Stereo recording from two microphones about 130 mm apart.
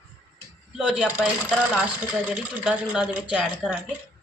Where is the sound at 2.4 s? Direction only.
10° right (ahead or behind).